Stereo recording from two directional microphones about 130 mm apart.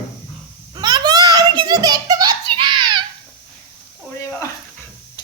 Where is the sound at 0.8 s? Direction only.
35° right (ahead or behind).